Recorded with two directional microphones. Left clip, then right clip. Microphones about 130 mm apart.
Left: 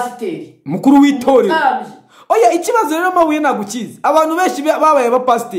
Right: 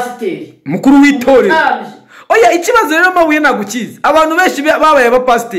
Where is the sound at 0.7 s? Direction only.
15° left (ahead or behind).